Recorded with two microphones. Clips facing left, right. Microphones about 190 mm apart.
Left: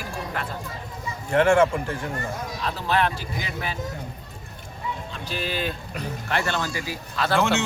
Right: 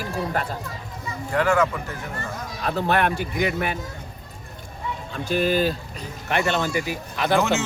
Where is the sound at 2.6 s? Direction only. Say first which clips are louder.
Right 3 dB; 55° right (ahead or behind).